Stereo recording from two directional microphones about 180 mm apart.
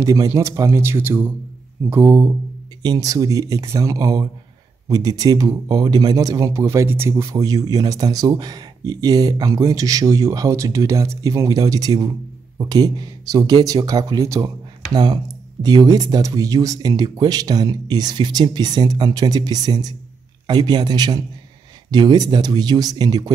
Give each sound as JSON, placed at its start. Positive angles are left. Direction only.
{"t": 0.0, "sound": "speech", "side_deg": -20}